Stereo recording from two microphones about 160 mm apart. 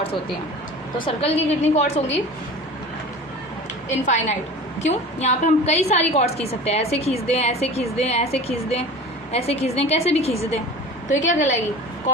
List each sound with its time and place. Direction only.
0.9 s a woman's voice: 35° left (ahead or behind)
4.0 s a woman's voice: 45° left (ahead or behind)